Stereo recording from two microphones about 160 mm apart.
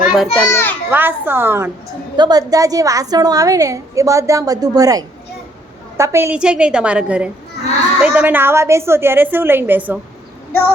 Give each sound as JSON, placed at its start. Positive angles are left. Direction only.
{"t": 0.0, "sound": "children playing", "side_deg": 0}
{"t": 0.5, "sound": "children playing", "side_deg": 15}
{"t": 0.9, "sound": "a woman's voice", "side_deg": -10}
{"t": 2.1, "sound": "a woman's voice", "side_deg": -25}